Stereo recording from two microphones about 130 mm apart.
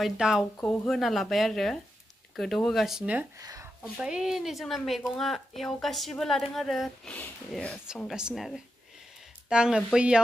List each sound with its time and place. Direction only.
0.0 s speech: 5° right (ahead or behind)
3.3 s speech: 25° right (ahead or behind)
4.0 s speech: 5° right (ahead or behind)
8.1 s speech: 5° right (ahead or behind)